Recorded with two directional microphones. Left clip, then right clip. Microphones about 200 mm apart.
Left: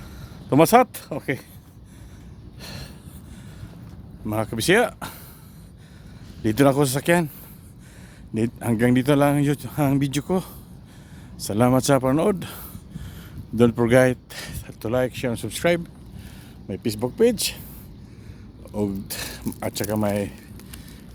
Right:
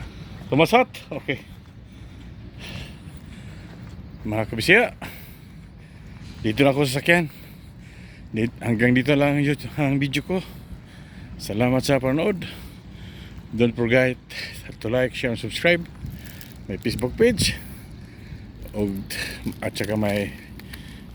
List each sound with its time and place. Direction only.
0.5 s speech: 30° left (ahead or behind)
2.6 s a sound: 25° left (ahead or behind)
4.3 s speech: 15° left (ahead or behind)
6.6 s speech: 25° left (ahead or behind)
8.3 s speech: 15° left (ahead or behind)
13.6 s speech: 25° left (ahead or behind)
14.7 s speech: 10° left (ahead or behind)
18.7 s speech: 15° left (ahead or behind)